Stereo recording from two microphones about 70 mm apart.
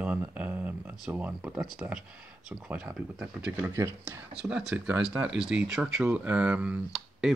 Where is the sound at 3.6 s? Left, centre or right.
Right.